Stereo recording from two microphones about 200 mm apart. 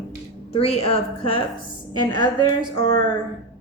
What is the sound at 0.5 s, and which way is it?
Speech, 30° left (ahead or behind).